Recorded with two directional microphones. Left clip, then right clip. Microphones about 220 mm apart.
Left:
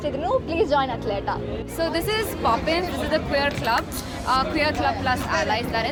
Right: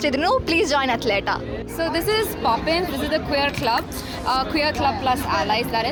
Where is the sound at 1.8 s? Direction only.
15° right (ahead or behind).